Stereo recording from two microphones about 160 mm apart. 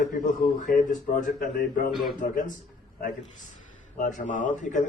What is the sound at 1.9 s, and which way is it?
Speech, centre (ahead or behind).